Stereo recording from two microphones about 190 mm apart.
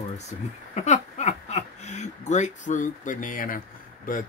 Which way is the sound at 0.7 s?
40° left (ahead or behind).